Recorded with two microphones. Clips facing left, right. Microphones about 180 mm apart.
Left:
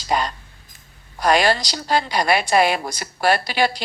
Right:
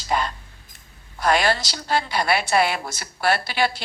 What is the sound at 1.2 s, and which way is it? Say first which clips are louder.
Speech: left 3 dB; 15° left (ahead or behind).